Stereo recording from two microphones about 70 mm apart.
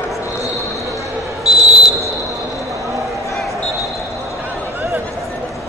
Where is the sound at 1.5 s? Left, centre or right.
Centre.